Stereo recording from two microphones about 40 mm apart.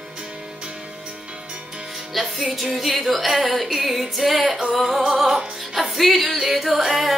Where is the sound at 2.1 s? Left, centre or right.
Centre.